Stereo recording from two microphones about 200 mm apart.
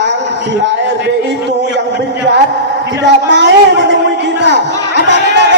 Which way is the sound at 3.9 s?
60° right (ahead or behind).